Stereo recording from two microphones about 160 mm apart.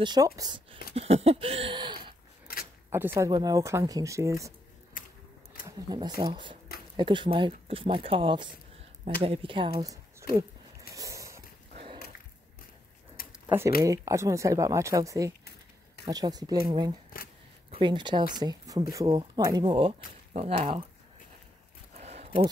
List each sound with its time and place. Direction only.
0.0 s speech: 25° right (ahead or behind)
0.9 s speech: 40° right (ahead or behind)
2.4 s a sound: 70° left (ahead or behind)
2.9 s speech: 15° right (ahead or behind)
3.3 s speech: 25° right (ahead or behind)
5.7 s speech: 25° right (ahead or behind)
10.3 s a sound: 20° right (ahead or behind)
13.2 s a sound: 65° left (ahead or behind)
13.7 s speech: 20° right (ahead or behind)
17.6 s speech: 30° right (ahead or behind)
20.3 s speech: 40° right (ahead or behind)
21.9 s a sound: 40° right (ahead or behind)